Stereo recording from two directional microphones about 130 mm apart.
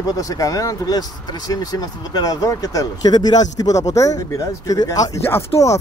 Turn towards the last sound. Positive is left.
turn(degrees=25)  # may be behind; listen again after turning